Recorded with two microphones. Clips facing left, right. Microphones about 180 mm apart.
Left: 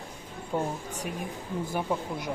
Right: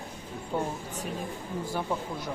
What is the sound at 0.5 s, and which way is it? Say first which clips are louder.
Speech: left 1 dB; 10° left (ahead or behind).